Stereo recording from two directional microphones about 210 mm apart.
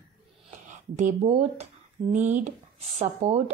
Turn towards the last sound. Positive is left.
turn(degrees=-30)  # may be behind; listen again after turning